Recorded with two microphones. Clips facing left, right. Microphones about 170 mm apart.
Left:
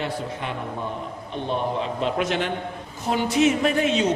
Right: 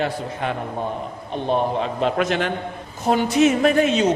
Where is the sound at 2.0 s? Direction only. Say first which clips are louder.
Right 3 dB; 55° right (ahead or behind).